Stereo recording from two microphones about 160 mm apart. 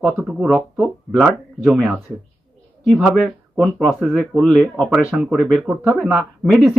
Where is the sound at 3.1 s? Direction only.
Centre (ahead or behind).